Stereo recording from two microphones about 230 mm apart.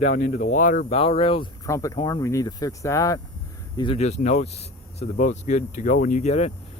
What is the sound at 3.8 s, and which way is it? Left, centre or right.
Speech, left.